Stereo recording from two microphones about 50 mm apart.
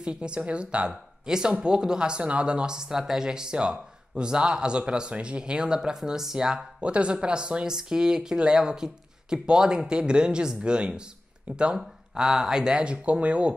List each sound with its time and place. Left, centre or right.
0.0 s speech: centre
6.8 s speech: right